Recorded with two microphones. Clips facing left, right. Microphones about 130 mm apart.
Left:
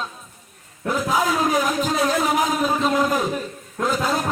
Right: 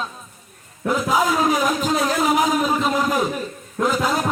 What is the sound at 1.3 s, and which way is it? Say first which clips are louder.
Speech: right 1 dB; 15° right (ahead or behind).